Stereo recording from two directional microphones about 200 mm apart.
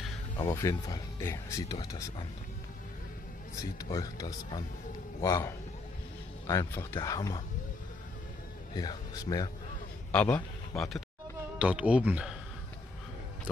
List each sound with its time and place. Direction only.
0.4 s speech: 20° left (ahead or behind)
3.5 s speech: 15° left (ahead or behind)
8.7 s speech: 20° left (ahead or behind)
10.1 s speech: 5° left (ahead or behind)